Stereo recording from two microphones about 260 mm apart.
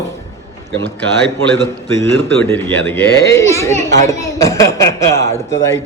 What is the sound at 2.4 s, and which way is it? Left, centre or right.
A man's voice, centre.